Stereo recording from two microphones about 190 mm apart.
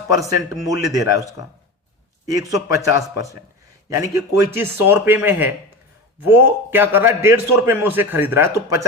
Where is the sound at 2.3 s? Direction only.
20° right (ahead or behind).